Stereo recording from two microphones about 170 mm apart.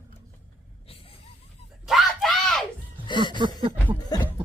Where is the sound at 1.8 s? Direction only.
Centre (ahead or behind).